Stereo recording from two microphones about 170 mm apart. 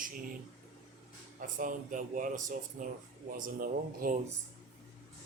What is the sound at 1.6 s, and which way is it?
Speech, 50° right (ahead or behind).